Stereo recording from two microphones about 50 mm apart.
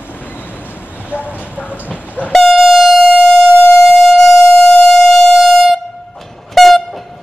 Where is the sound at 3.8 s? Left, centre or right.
Centre.